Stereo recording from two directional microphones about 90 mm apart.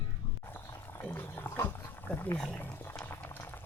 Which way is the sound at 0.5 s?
25° left (ahead or behind).